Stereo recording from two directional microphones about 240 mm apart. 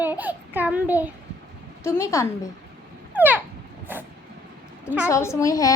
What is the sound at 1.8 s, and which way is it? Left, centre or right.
Speech, centre.